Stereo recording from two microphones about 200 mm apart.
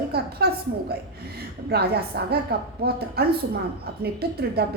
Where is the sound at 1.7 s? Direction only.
55° right (ahead or behind).